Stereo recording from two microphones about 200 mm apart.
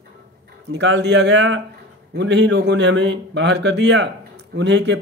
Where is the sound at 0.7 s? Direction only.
60° right (ahead or behind).